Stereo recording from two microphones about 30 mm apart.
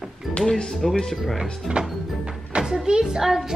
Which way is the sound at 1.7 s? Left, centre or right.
Right.